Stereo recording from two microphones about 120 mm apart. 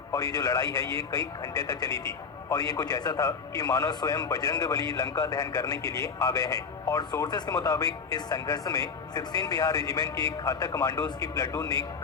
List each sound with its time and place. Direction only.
0.1 s a man's voice: 25° left (ahead or behind)